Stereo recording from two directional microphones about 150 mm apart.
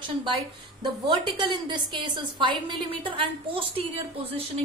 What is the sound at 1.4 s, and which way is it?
A woman's voice, 30° right (ahead or behind).